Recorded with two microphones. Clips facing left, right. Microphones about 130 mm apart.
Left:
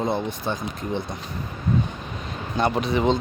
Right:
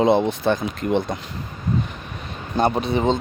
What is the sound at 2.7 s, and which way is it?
Speech, 25° right (ahead or behind).